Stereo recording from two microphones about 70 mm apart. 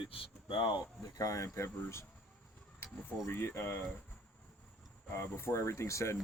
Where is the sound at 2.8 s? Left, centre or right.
Left.